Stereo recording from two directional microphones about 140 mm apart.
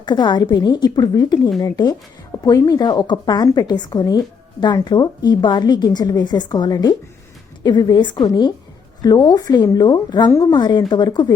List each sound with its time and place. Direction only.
0.0 s a woman's voice: 35° left (ahead or behind)